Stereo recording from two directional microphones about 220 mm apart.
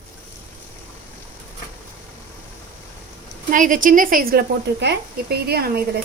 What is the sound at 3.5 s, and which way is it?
Speech, 35° right (ahead or behind).